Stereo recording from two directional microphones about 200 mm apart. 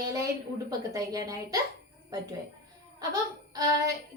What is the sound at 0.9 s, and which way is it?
Speech, 20° right (ahead or behind).